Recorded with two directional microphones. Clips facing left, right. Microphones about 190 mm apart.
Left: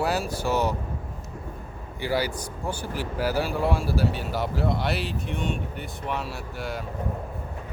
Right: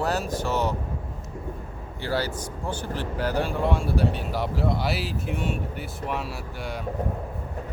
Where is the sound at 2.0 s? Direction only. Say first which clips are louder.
Left 1 dB; 10° left (ahead or behind).